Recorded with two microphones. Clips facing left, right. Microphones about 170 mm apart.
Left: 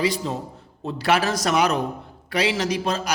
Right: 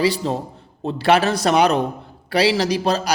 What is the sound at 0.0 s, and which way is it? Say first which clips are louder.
A man's voice: right 4 dB; 35° right (ahead or behind).